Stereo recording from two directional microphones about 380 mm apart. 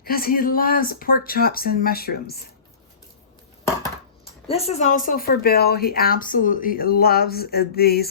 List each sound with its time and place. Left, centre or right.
0.0 s speech: left
4.4 s speech: centre